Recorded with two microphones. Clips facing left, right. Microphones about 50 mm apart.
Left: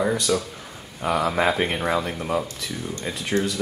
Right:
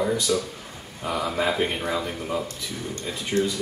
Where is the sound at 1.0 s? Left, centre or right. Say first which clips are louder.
Left 4 dB; left.